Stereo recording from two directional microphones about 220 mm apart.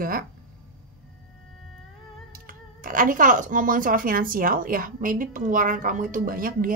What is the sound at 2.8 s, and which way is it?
A woman's voice, 40° right (ahead or behind).